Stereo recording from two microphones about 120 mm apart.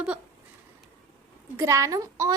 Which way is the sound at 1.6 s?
25° right (ahead or behind).